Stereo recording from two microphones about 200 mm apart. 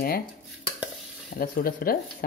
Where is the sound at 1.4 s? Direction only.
45° left (ahead or behind).